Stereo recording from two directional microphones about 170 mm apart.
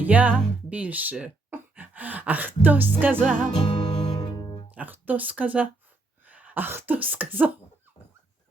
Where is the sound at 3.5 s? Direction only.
35° left (ahead or behind).